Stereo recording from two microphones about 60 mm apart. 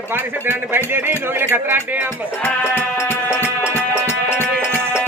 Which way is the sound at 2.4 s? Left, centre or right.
Left.